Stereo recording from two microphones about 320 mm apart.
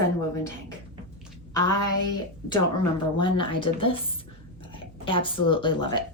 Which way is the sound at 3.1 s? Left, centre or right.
Centre.